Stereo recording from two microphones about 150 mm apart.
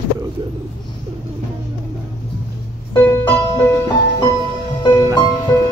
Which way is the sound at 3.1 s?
20° left (ahead or behind).